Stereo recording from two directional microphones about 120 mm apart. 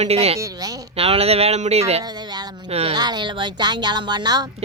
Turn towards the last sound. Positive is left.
turn(degrees=-35)  # may be behind; listen again after turning